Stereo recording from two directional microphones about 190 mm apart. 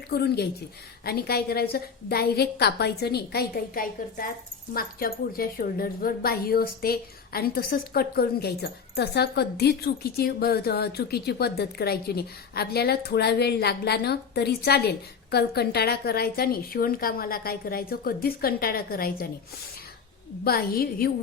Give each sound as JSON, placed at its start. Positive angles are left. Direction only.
{"t": 0.1, "sound": "a woman's voice", "side_deg": 55}
{"t": 20.4, "sound": "a woman's voice", "side_deg": 55}